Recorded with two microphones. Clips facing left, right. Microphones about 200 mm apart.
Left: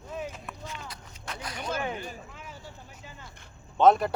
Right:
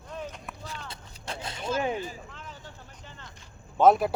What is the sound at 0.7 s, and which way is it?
Speech, 30° right (ahead or behind).